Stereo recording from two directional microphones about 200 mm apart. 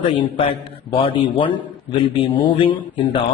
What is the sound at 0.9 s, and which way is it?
A man's voice, 25° left (ahead or behind).